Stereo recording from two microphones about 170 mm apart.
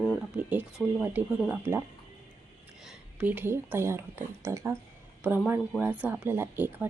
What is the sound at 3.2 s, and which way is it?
A woman's voice, 10° right (ahead or behind).